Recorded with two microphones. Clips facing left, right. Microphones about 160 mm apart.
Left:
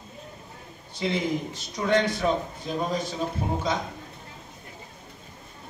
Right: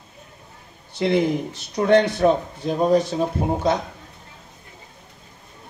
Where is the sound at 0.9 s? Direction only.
65° right (ahead or behind).